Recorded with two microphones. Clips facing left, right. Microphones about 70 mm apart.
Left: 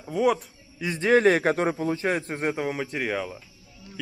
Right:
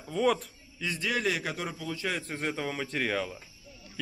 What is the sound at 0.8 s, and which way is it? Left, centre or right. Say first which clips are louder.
A man's voice: left 11 dB; left.